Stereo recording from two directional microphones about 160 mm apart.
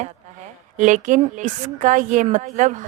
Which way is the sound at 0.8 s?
50° right (ahead or behind).